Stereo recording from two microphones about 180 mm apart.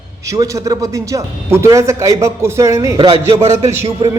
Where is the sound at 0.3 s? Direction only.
15° right (ahead or behind).